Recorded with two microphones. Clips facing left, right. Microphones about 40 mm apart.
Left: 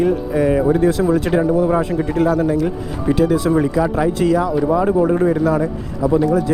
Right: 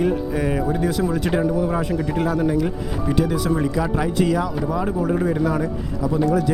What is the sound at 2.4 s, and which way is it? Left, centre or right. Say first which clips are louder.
Speech: left 3 dB; centre.